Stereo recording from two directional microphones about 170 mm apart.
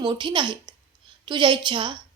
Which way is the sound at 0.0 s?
25° right (ahead or behind).